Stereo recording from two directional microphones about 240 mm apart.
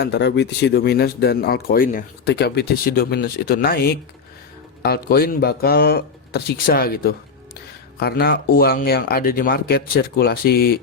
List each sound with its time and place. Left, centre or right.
0.0 s speech: left